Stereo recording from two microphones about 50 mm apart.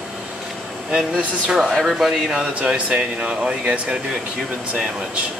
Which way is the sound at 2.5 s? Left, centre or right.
Centre.